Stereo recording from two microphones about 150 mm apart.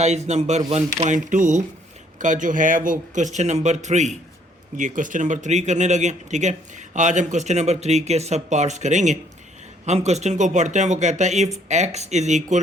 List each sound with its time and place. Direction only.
0.0 s speech: 50° right (ahead or behind)